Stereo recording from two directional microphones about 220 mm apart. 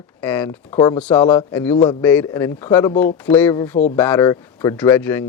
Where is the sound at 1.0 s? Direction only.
10° left (ahead or behind).